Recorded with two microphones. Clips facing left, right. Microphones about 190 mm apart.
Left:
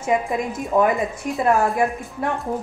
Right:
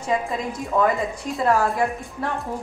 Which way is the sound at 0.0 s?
20° left (ahead or behind).